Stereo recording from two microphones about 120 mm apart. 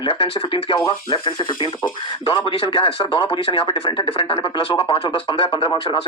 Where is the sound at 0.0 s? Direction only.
45° left (ahead or behind).